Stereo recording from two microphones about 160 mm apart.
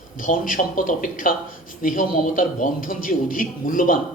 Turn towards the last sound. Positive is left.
turn(degrees=55)  # may be behind; listen again after turning